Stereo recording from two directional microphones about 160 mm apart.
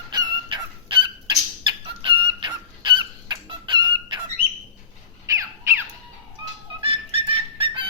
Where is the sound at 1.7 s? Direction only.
30° right (ahead or behind).